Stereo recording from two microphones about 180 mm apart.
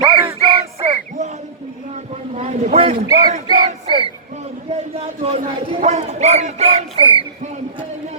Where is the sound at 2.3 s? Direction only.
35° right (ahead or behind).